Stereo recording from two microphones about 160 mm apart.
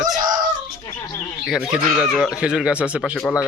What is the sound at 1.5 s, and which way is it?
Speech, centre (ahead or behind).